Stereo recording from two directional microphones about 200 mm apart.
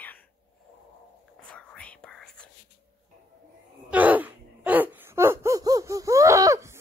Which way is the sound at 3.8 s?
10° right (ahead or behind).